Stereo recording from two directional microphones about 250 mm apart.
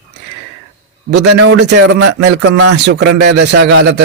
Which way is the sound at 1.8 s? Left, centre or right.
Right.